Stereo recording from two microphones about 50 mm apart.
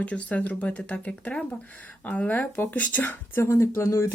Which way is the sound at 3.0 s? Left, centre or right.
Left.